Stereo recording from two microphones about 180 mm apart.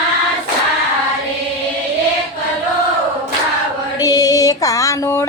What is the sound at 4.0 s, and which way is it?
Female singing, 20° left (ahead or behind).